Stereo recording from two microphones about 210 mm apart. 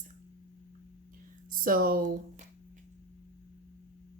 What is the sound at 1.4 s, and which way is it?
Speech, 40° right (ahead or behind).